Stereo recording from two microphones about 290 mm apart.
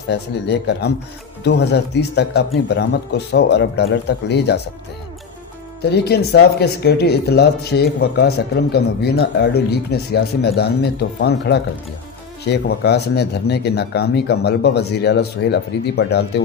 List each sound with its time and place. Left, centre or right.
0.1 s speech: left
5.9 s speech: left
11.2 s speech: left